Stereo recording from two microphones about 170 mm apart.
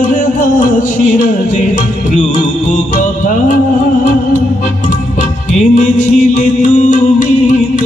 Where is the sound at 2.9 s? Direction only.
50° left (ahead or behind).